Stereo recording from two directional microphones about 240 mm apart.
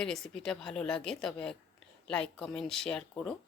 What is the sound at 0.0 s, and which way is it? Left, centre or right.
Speech, centre.